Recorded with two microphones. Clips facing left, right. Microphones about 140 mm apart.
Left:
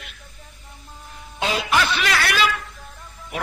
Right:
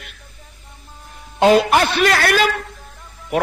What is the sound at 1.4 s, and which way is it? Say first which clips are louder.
A man's voice: right 9 dB; 50° right (ahead or behind).